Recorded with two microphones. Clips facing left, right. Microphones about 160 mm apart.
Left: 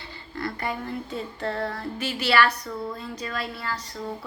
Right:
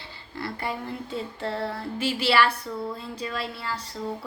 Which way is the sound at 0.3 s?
25° right (ahead or behind).